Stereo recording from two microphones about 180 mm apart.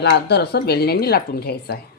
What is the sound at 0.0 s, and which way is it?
Speech, 65° left (ahead or behind).